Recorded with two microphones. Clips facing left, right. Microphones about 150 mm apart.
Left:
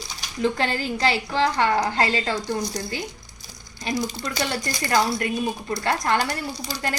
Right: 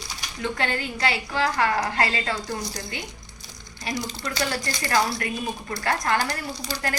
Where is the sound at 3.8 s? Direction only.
30° left (ahead or behind).